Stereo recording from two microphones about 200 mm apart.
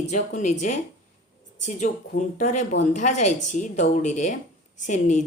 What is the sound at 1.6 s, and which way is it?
A woman's voice, 35° left (ahead or behind).